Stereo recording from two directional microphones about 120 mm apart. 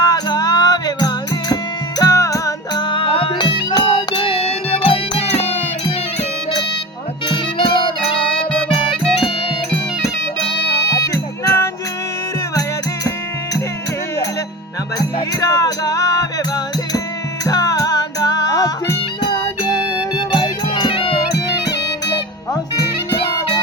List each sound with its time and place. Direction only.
0.0 s music: 35° left (ahead or behind)
2.8 s music: 45° left (ahead or behind)
7.3 s music: 45° left (ahead or behind)
10.9 s music: 25° left (ahead or behind)
14.9 s music: 30° left (ahead or behind)
17.4 s music: 30° left (ahead or behind); by 21.2 s 50° left (ahead or behind)